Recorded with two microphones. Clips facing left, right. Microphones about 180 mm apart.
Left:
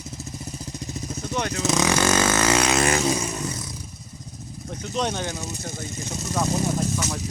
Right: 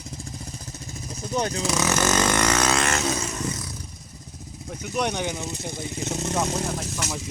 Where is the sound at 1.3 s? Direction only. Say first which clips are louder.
Right 1 dB; 30° right (ahead or behind).